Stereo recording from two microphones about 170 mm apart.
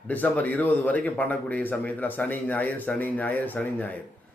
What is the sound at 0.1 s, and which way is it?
A man's voice, 10° left (ahead or behind).